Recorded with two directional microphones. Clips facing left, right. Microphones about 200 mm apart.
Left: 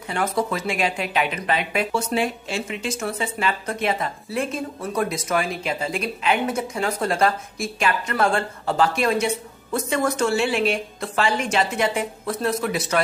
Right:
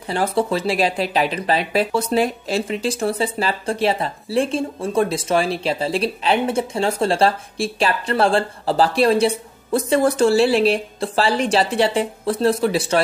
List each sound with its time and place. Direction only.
0.0 s speech: 30° right (ahead or behind)